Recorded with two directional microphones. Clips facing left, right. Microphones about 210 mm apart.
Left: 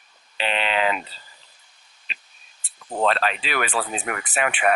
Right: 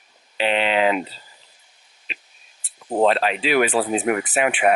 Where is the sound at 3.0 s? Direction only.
10° right (ahead or behind).